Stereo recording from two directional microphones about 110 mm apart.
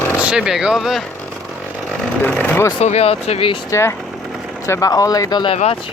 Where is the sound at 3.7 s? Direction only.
25° left (ahead or behind); by 5.5 s 40° left (ahead or behind).